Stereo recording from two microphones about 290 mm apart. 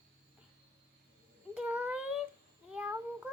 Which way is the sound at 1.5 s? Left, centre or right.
Centre.